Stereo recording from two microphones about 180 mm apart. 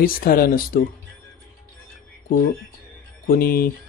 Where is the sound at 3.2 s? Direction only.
55° left (ahead or behind).